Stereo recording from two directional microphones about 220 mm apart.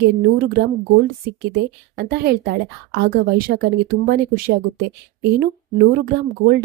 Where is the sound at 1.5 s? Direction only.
45° right (ahead or behind).